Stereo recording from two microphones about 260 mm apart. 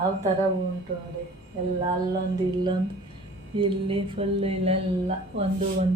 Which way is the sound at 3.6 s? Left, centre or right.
Right.